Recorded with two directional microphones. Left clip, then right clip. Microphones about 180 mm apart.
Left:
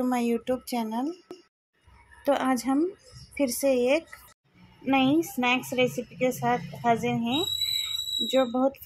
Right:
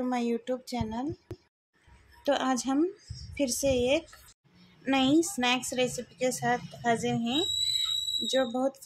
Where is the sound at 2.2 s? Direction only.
10° left (ahead or behind).